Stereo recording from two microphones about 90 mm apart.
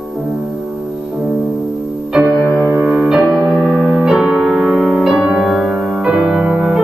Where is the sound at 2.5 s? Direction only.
25° right (ahead or behind).